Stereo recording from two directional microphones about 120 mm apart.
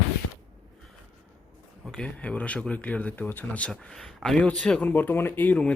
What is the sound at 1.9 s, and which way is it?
Speech, 10° left (ahead or behind).